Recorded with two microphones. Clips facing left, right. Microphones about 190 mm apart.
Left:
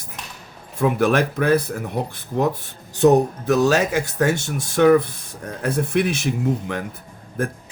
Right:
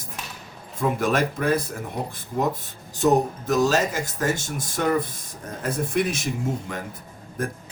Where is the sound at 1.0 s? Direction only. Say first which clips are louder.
Left 4 dB; 65° left (ahead or behind).